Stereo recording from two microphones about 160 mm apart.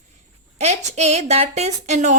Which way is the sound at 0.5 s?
45° right (ahead or behind).